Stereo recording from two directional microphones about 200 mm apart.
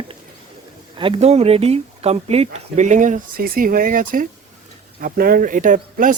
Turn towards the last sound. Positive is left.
turn(degrees=-40)  # may be behind; listen again after turning